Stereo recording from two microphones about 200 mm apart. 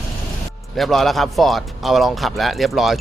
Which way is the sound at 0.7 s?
Centre (ahead or behind).